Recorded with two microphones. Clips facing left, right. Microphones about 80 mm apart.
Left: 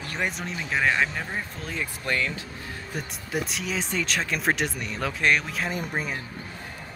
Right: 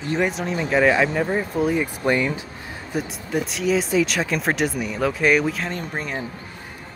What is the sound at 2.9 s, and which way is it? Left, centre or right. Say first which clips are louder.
Speech: right 7 dB; centre.